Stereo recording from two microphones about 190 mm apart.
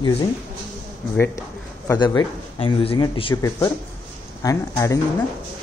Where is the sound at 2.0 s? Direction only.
20° left (ahead or behind).